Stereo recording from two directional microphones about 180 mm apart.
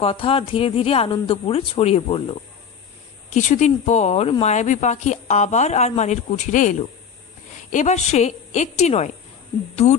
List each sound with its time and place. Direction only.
0.0 s speech: 30° left (ahead or behind)
3.3 s speech: 40° left (ahead or behind)